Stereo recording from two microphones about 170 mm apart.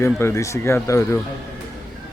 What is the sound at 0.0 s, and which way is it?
Speech, 15° left (ahead or behind).